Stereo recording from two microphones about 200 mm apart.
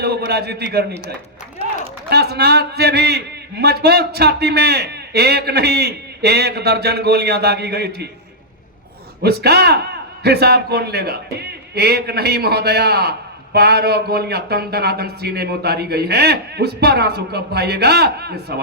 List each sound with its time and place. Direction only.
0.3 s a man's voice: 55° right (ahead or behind)
2.0 s a man's voice: 55° right (ahead or behind)
9.2 s a man's voice: 55° right (ahead or behind)